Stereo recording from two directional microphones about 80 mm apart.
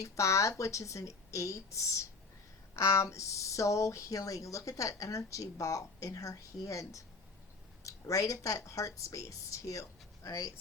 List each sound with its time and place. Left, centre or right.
0.0 s a woman's voice: left